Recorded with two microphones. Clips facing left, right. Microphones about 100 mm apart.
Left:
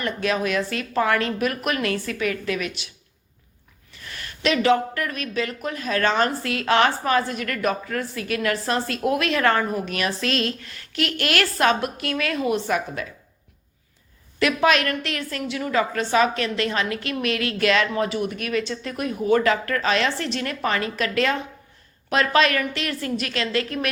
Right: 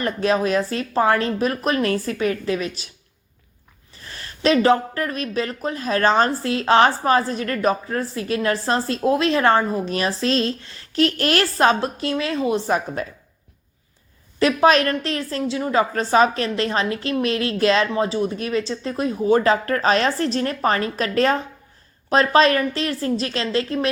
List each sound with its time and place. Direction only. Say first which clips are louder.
0.0 s a woman's voice: right 4 dB; 35° right (ahead or behind)
3.9 s a woman's voice: even; 35° right (ahead or behind)
14.3 s a woman's voice: right 4 dB; 35° right (ahead or behind)